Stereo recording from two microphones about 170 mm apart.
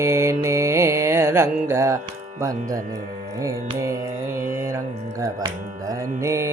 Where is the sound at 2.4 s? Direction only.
20° right (ahead or behind).